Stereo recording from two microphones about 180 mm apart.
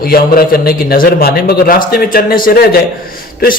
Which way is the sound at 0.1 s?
55° left (ahead or behind).